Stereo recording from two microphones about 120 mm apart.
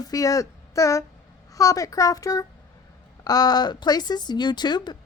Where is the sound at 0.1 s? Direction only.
30° left (ahead or behind).